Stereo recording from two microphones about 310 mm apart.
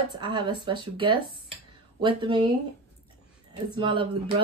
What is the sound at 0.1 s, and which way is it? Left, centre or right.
Speech, centre.